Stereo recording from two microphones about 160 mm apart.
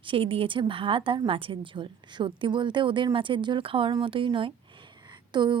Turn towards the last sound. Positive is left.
turn(degrees=-30)  # may be behind; listen again after turning